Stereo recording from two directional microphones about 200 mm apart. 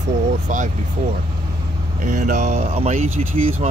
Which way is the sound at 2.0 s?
40° right (ahead or behind).